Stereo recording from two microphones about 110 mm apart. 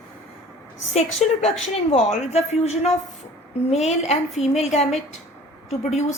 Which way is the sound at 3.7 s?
90° left.